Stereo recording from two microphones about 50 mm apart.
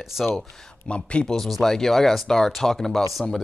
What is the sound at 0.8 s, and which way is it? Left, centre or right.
Speech, left.